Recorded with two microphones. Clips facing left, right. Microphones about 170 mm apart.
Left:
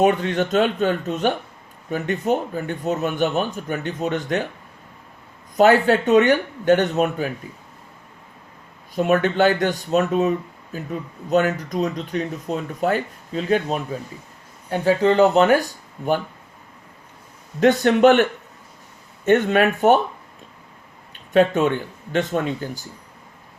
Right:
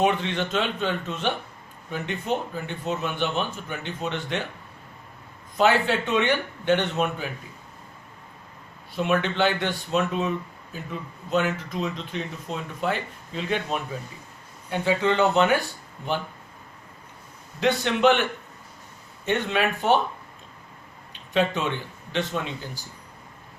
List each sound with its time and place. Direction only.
0.0 s speech: 45° left (ahead or behind)
5.5 s speech: 45° left (ahead or behind)
9.0 s speech: 45° left (ahead or behind)
17.6 s speech: 45° left (ahead or behind)
21.1 s speech: 50° left (ahead or behind)